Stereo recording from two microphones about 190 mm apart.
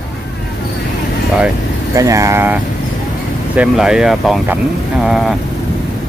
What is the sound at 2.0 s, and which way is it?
Speech, 15° right (ahead or behind).